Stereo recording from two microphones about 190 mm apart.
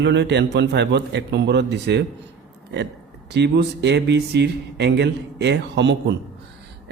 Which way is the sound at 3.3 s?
65° right (ahead or behind).